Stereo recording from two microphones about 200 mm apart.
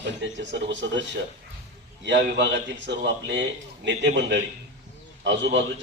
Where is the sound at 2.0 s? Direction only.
60° right (ahead or behind).